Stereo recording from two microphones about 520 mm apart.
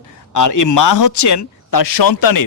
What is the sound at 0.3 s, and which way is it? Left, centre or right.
Speech, left.